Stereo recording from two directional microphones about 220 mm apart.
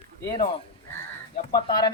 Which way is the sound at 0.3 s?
25° left (ahead or behind).